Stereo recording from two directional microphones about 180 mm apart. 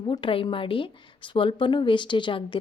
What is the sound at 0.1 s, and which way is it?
A woman's voice, 30° left (ahead or behind).